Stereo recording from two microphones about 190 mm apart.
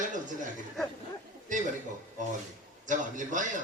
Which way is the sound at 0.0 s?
40° right (ahead or behind).